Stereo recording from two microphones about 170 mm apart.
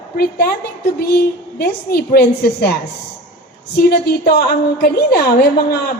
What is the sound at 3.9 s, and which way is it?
A woman's voice, 75° left (ahead or behind).